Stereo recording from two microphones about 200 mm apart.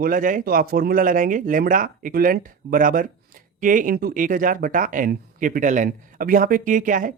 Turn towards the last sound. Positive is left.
turn(degrees=-40)  # may be behind; listen again after turning